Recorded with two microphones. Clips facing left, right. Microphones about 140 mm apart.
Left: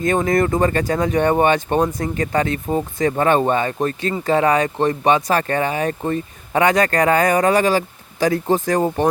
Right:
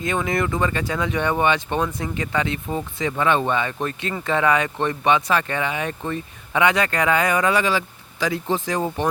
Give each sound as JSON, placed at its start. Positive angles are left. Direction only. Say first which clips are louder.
{"t": 0.0, "sound": "speech", "louder": "left 6 dB", "side_deg": 45}